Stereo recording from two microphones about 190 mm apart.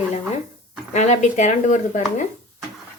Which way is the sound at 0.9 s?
35° left (ahead or behind).